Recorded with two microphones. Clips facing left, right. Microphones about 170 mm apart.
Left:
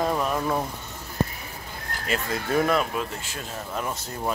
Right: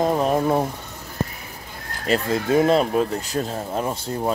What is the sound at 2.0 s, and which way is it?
Speech, 35° right (ahead or behind).